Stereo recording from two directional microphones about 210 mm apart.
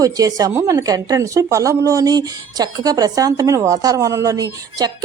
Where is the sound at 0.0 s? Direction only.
15° right (ahead or behind).